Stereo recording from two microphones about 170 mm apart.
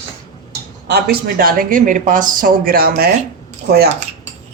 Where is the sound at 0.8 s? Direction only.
65° right (ahead or behind).